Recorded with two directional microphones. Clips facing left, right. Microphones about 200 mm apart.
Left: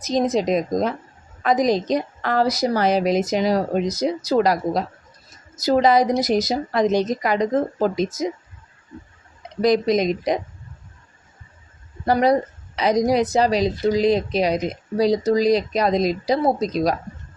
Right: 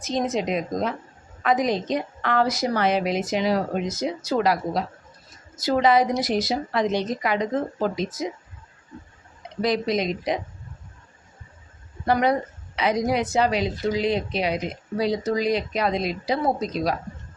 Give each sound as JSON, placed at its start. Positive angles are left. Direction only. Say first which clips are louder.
{"t": 0.0, "sound": "a woman's voice", "louder": "left 5 dB", "side_deg": 35}
{"t": 9.6, "sound": "speech", "louder": "left 5 dB", "side_deg": 45}
{"t": 12.0, "sound": "a woman's voice", "louder": "left 4 dB", "side_deg": 35}